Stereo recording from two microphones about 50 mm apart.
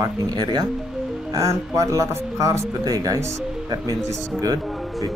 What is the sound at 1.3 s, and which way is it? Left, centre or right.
Speech, right.